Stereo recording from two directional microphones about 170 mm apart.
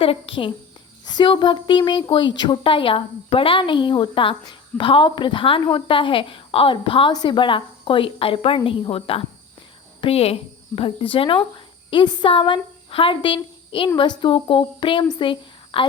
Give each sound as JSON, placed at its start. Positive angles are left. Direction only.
{"t": 0.0, "sound": "a woman's voice", "side_deg": 30}